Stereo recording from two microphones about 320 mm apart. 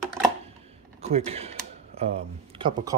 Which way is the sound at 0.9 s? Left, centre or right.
Centre.